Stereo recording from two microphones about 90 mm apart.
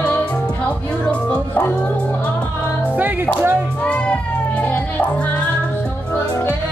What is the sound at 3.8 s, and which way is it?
Music, 15° left (ahead or behind).